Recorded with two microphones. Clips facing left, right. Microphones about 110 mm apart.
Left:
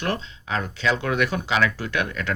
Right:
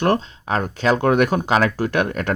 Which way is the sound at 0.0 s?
45° right (ahead or behind).